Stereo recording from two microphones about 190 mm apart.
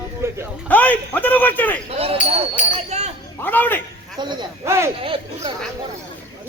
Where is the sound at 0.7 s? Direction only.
10° left (ahead or behind).